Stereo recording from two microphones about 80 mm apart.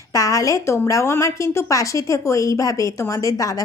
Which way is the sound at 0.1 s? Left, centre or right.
Left.